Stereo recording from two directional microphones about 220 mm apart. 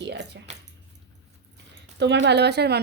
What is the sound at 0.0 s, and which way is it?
Squish, 50° right (ahead or behind).